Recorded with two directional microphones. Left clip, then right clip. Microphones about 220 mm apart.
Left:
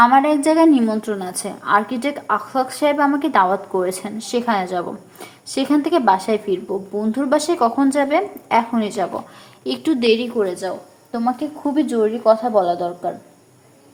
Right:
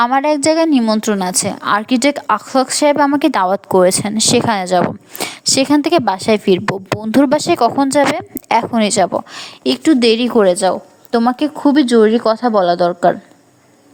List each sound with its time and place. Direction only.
0.0 s a woman's voice: 50° right (ahead or behind)